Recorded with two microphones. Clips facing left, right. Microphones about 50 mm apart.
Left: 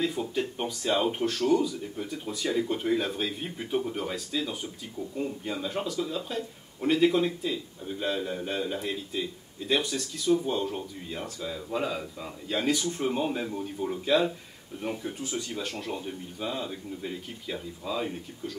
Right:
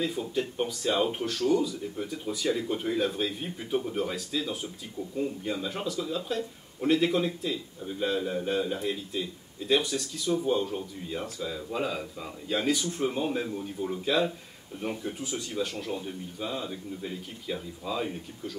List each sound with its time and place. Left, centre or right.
0.0 s speech: centre